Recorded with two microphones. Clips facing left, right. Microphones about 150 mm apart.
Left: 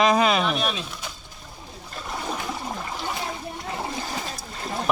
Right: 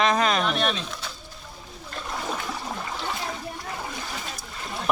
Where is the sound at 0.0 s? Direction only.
10° left (ahead or behind).